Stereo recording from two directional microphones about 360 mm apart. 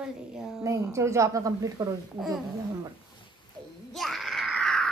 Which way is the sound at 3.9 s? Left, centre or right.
Centre.